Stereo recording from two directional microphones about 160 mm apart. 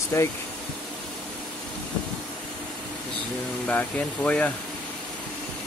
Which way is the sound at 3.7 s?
10° left (ahead or behind).